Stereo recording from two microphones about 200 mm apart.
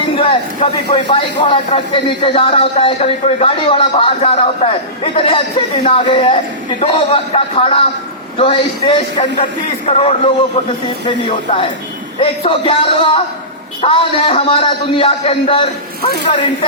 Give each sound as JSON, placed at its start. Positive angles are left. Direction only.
{"t": 0.2, "sound": "speech", "side_deg": 30}